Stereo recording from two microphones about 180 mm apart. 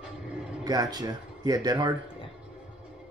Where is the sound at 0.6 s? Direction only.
20° right (ahead or behind).